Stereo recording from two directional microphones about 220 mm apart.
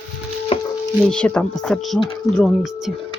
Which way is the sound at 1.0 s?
5° left (ahead or behind).